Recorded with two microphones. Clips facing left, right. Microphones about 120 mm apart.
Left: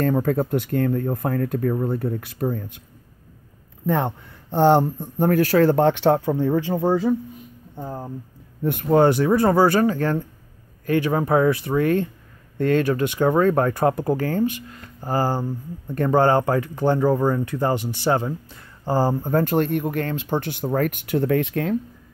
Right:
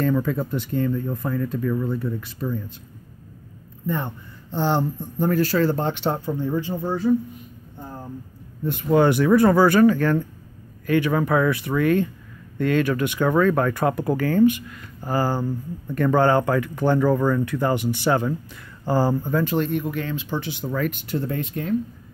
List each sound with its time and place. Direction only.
0.0 s speech: 50° left (ahead or behind)
3.8 s speech: 80° left
4.6 s speech: 55° left (ahead or behind); by 8.1 s 90° left
8.8 s speech: 35° left (ahead or behind)
19.3 s speech: 50° left (ahead or behind); by 21.7 s 85° left